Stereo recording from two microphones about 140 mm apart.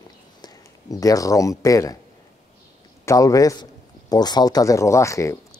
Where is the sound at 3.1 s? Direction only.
25° left (ahead or behind).